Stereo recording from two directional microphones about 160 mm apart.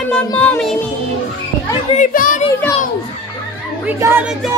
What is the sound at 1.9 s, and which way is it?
Speech, 55° left (ahead or behind).